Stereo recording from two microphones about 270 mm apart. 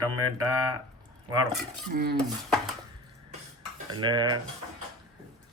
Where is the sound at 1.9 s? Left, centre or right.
Right.